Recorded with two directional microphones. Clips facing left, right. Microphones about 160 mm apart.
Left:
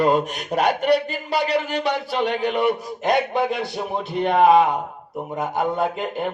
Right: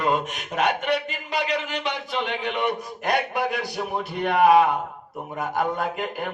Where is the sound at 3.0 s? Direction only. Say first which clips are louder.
Left 4 dB; 25° left (ahead or behind).